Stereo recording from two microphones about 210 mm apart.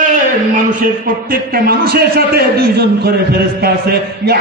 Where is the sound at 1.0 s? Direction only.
45° right (ahead or behind).